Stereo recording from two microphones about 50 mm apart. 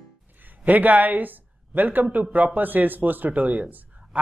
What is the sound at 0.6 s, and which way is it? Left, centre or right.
Speech, right.